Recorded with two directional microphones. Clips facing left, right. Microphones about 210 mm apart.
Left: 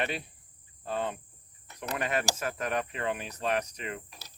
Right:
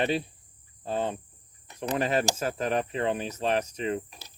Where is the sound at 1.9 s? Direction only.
30° right (ahead or behind).